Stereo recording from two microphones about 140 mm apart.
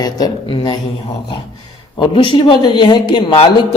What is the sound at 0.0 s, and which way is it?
Speech, 35° left (ahead or behind).